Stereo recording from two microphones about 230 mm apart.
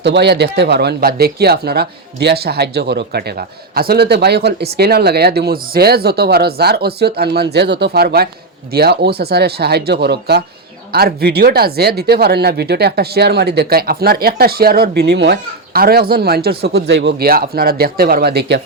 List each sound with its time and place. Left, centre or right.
0.0 s speech: right